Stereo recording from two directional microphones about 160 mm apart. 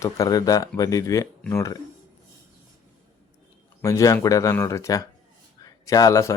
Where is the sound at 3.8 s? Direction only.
20° left (ahead or behind).